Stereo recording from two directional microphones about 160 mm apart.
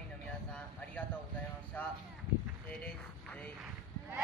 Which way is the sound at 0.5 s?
10° left (ahead or behind).